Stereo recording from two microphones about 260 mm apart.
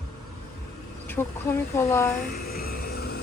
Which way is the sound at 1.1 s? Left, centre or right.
Centre.